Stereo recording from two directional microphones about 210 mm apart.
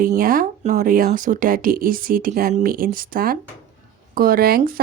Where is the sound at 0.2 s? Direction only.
40° right (ahead or behind).